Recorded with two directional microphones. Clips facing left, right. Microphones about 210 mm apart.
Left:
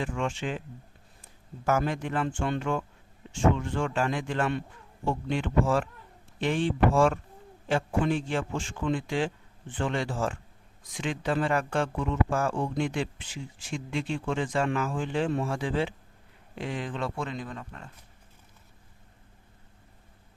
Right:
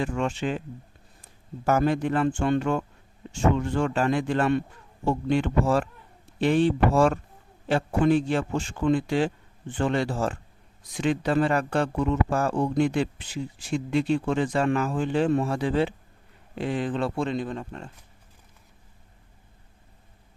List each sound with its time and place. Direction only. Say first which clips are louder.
0.0 s speech: right 4 dB; 40° right (ahead or behind)
1.6 s speech: right 5 dB; 35° right (ahead or behind)